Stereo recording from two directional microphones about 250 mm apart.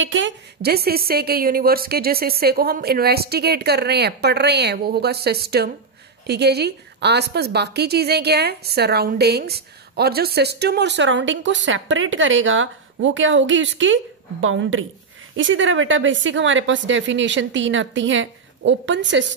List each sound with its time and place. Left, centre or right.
0.0 s a woman's voice: right